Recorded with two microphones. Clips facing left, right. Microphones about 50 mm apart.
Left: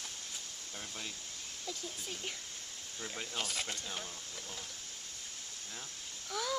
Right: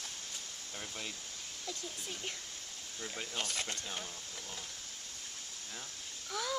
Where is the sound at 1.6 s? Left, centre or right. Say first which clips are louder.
Even; centre.